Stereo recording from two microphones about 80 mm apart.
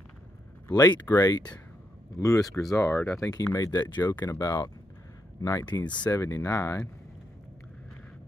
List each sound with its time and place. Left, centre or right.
0.7 s speech: left
2.1 s speech: left
5.7 s speech: left
6.1 s speech: left